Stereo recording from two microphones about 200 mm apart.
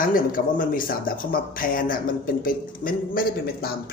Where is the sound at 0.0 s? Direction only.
45° left (ahead or behind).